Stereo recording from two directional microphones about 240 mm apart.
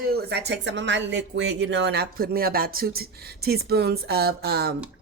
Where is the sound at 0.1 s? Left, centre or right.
Right.